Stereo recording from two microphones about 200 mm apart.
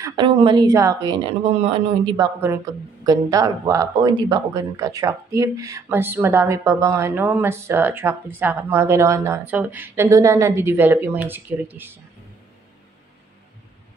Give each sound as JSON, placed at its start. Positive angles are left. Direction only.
{"t": 0.0, "sound": "a woman's voice", "side_deg": -20}